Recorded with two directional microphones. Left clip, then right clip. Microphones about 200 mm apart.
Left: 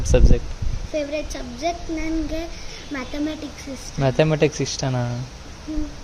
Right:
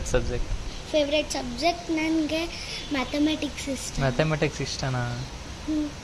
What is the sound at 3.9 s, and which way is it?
Speech, 55° left (ahead or behind).